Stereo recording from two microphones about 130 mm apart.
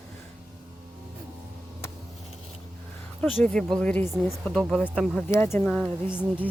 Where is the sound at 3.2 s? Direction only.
5° left (ahead or behind).